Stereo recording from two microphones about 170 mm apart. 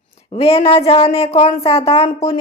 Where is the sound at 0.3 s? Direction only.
35° left (ahead or behind).